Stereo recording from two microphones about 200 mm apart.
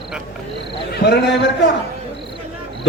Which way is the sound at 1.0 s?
60° left (ahead or behind).